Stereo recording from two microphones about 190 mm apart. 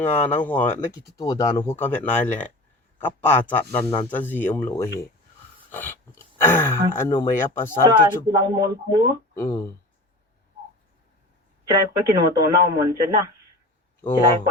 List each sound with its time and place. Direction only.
0.1 s speech: 10° left (ahead or behind)
1.2 s speech: 20° left (ahead or behind)
7.9 s speech: 20° right (ahead or behind)
9.3 s speech: 15° left (ahead or behind)
11.7 s speech: 20° right (ahead or behind)